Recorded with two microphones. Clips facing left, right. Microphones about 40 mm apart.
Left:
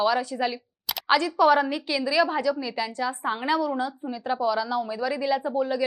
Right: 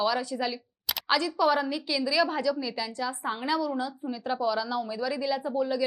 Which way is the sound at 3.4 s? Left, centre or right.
Left.